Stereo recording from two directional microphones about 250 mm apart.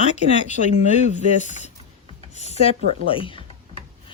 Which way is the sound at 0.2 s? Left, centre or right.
Left.